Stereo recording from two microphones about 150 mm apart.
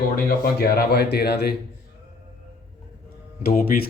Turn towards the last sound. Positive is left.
turn(degrees=75)  # may be behind; listen again after turning